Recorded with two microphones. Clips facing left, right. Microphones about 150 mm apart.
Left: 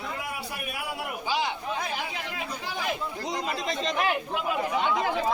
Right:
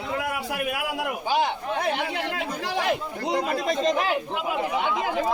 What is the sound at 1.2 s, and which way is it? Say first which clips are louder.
Chatter: right 4 dB; 55° right (ahead or behind).